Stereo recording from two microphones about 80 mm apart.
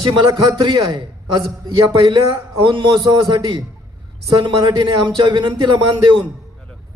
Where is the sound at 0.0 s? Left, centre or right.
Right.